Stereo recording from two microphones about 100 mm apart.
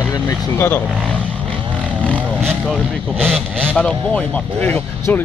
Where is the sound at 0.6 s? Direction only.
20° left (ahead or behind).